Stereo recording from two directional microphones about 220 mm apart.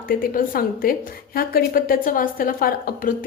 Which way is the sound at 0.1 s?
40° left (ahead or behind).